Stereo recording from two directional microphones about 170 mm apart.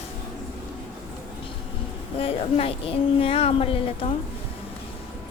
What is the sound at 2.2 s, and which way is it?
A woman's voice, 35° left (ahead or behind).